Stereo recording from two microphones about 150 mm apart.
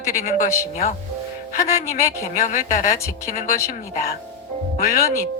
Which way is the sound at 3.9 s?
80° left.